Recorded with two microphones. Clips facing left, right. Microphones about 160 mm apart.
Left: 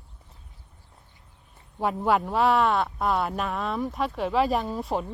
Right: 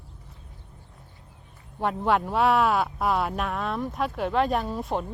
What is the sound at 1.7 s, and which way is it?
Speech, centre (ahead or behind).